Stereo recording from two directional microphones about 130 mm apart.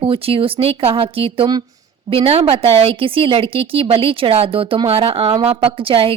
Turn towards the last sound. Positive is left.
turn(degrees=-45)  # may be behind; listen again after turning